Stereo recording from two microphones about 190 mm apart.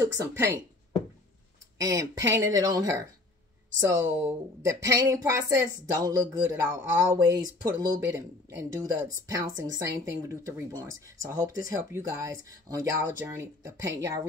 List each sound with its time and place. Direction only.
0.0 s speech: 15° right (ahead or behind)
1.8 s speech: 15° right (ahead or behind)